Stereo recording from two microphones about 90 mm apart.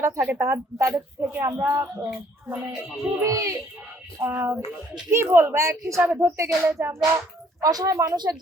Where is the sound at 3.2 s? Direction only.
35° right (ahead or behind).